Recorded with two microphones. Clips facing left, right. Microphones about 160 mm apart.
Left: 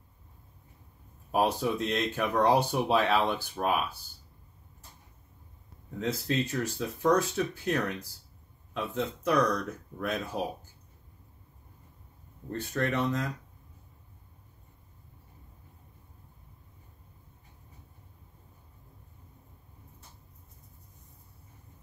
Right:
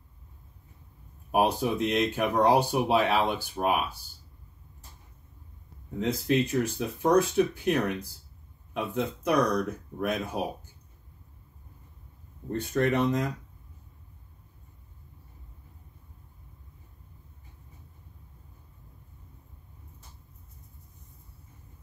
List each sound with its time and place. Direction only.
1.3 s speech: 15° right (ahead or behind)
5.9 s speech: 15° right (ahead or behind)
12.5 s speech: 15° right (ahead or behind)